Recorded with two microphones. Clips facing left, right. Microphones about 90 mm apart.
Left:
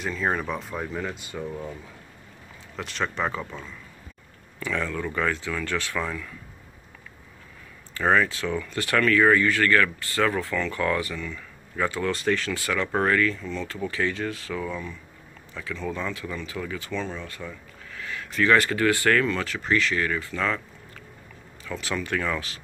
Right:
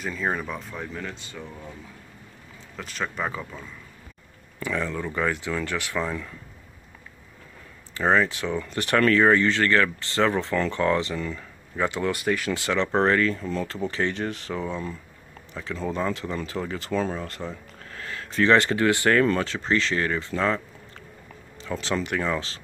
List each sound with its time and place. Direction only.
0.0 s speech: centre (ahead or behind); by 1.5 s 15° left (ahead or behind)
2.7 s speech: centre (ahead or behind)
4.6 s speech: 15° right (ahead or behind)
7.9 s speech: 20° right (ahead or behind)
11.1 s speech: 35° right (ahead or behind)
11.7 s speech: 20° right (ahead or behind); by 13.7 s 40° right (ahead or behind)
13.7 s speech: 25° right (ahead or behind); by 17.3 s 45° right (ahead or behind)
18.1 s speech: 30° right (ahead or behind)
21.6 s speech: 30° right (ahead or behind)